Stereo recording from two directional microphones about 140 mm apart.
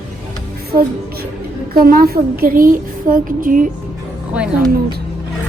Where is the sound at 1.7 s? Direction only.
90° right.